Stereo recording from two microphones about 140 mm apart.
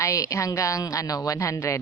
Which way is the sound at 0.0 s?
20° left (ahead or behind).